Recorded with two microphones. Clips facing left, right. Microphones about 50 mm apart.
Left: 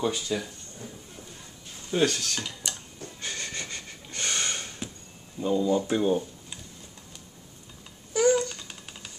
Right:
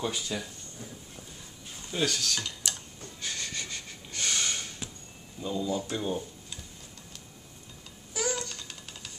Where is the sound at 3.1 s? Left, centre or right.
Left.